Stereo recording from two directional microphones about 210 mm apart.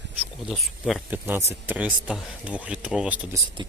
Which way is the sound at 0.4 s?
Centre (ahead or behind).